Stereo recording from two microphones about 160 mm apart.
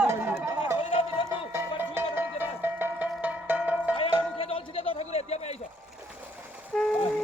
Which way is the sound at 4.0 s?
35° left (ahead or behind).